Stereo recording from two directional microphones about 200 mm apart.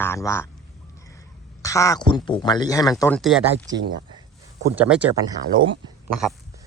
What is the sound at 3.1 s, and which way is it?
Speech, centre (ahead or behind).